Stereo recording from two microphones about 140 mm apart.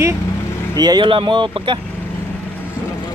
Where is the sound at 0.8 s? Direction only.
30° right (ahead or behind).